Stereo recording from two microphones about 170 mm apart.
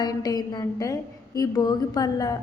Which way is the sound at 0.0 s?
25° left (ahead or behind).